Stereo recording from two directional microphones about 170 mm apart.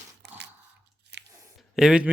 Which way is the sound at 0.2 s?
80° right.